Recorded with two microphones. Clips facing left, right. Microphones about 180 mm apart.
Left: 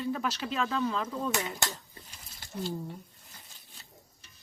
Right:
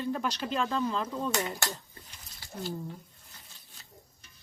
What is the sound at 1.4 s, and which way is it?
Speech, 20° left (ahead or behind).